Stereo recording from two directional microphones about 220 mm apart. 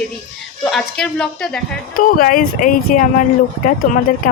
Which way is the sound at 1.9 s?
40° left (ahead or behind).